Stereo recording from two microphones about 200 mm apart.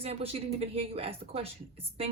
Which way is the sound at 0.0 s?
30° right (ahead or behind).